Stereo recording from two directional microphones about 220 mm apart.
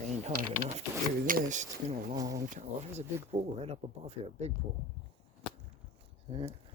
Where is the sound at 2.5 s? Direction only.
35° right (ahead or behind).